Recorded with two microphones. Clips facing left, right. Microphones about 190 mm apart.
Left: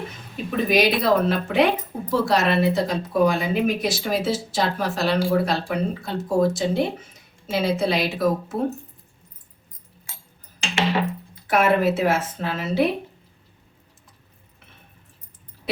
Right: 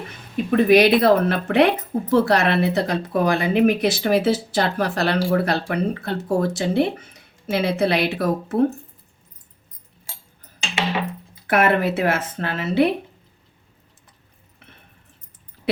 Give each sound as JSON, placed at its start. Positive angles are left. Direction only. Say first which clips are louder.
{"t": 0.5, "sound": "speech", "louder": "right 6 dB", "side_deg": -65}
{"t": 11.4, "sound": "speech", "louder": "even", "side_deg": -60}